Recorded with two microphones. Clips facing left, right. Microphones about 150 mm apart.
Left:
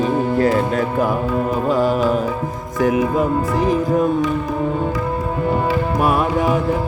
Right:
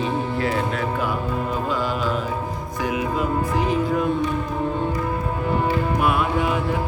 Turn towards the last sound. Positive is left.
turn(degrees=40)  # may be behind; listen again after turning